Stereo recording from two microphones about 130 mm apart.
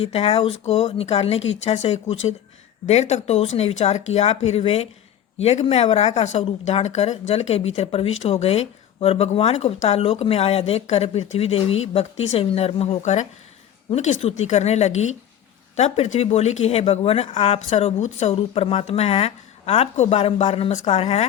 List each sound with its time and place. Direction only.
0.0 s speech: 50° left (ahead or behind)